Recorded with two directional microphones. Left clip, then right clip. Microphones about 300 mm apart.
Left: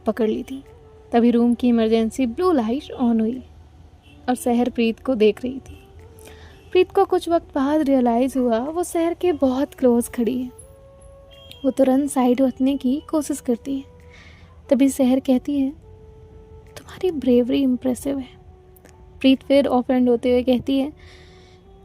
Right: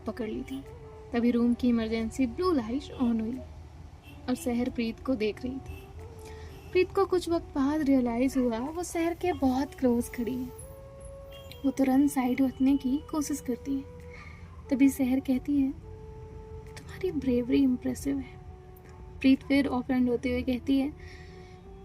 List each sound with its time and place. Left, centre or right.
0.0 s speech: left
6.7 s speech: left
11.4 s speech: left
14.7 s speech: left
16.7 s speech: left